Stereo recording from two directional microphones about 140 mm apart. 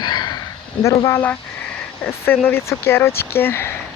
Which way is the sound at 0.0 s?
30° left (ahead or behind).